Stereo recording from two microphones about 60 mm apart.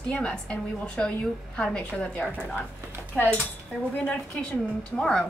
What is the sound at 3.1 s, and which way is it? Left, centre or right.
A woman's voice, left.